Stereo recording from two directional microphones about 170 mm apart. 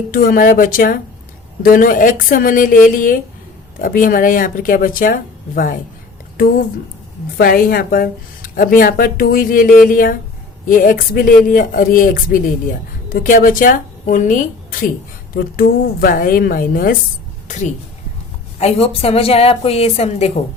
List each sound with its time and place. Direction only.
0.1 s a woman's voice: 55° left (ahead or behind)
7.3 s a woman's voice: 60° left (ahead or behind)
18.6 s a woman's voice: 35° left (ahead or behind)